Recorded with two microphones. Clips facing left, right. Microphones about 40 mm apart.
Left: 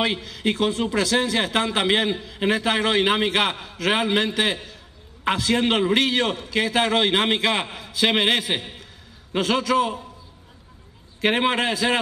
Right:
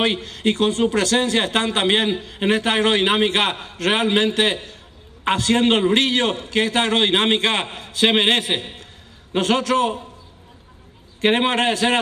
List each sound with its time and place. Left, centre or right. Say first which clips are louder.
0.0 s a man's voice: right 3 dB; right
11.1 s a man's voice: right 3 dB; right